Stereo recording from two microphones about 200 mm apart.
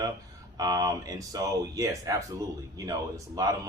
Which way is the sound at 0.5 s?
20° right (ahead or behind).